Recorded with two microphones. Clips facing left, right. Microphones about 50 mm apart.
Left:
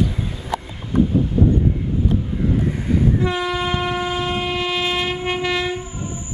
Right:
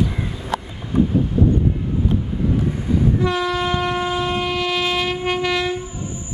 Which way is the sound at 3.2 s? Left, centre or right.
Centre.